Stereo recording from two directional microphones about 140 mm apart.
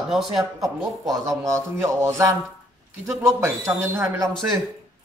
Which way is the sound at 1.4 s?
20° right (ahead or behind).